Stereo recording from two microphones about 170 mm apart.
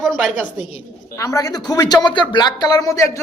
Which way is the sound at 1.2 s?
20° left (ahead or behind).